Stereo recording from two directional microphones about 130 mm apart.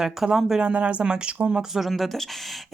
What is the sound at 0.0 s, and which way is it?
Speech, 5° right (ahead or behind).